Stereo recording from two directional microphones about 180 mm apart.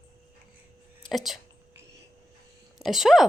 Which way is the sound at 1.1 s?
Centre (ahead or behind).